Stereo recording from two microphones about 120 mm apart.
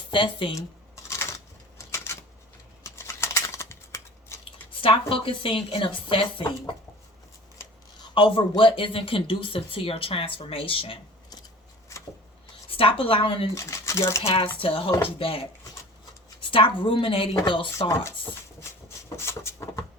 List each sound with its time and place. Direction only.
0.1 s speech: 45° left (ahead or behind)
1.0 s a sound: 25° left (ahead or behind)
2.8 s typing: 25° left (ahead or behind)
4.7 s speech: 50° left (ahead or behind)
8.1 s speech: 45° left (ahead or behind)
12.7 s speech: 50° left (ahead or behind)
13.5 s speech: 25° left (ahead or behind)
14.4 s speech: 50° left (ahead or behind)
17.7 s a sound: 25° left (ahead or behind)
19.1 s a sound: 20° left (ahead or behind)